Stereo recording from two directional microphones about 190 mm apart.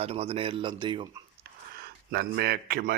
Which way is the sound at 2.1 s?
55° right (ahead or behind).